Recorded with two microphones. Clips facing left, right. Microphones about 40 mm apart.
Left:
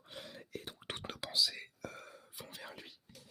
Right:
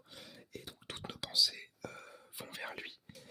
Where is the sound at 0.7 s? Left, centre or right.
Left.